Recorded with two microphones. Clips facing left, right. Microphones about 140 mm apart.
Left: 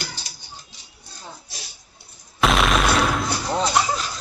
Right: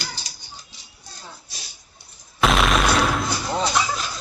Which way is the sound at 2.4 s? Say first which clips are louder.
Even; centre (ahead or behind).